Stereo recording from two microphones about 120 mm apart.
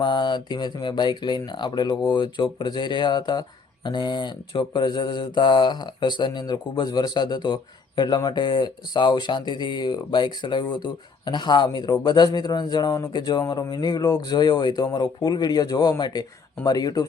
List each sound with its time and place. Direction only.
0.0 s mantra: 40° left (ahead or behind)